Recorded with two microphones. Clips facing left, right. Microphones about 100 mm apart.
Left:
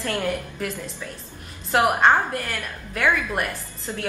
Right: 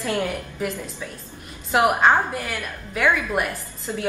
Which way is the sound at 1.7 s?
5° right (ahead or behind).